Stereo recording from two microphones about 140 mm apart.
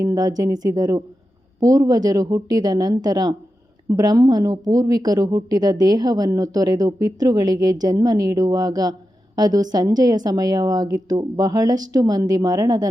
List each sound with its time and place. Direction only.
0.0 s speech: 25° right (ahead or behind)